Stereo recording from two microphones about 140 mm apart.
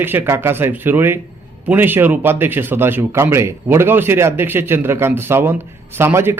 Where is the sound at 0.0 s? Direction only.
15° right (ahead or behind).